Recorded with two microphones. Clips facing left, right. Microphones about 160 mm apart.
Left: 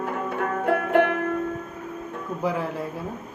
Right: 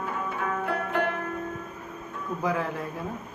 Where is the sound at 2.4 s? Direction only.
15° left (ahead or behind).